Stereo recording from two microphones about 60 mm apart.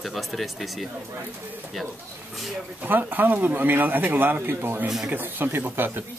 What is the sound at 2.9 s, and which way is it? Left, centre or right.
Speech, right.